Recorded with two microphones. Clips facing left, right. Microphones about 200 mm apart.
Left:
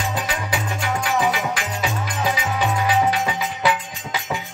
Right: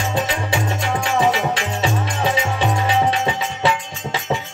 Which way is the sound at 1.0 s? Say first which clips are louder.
Right 4 dB; 25° right (ahead or behind).